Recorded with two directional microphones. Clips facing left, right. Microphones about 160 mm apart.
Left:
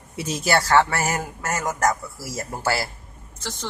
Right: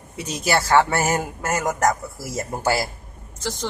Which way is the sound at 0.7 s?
20° right (ahead or behind).